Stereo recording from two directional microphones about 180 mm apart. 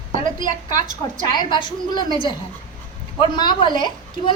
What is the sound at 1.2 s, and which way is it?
A woman's voice, 25° left (ahead or behind).